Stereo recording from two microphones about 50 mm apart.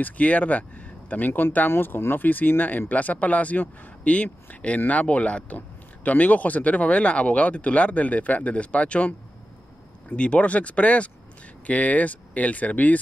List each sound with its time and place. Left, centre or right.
0.0 s speech: left
1.7 s speech: left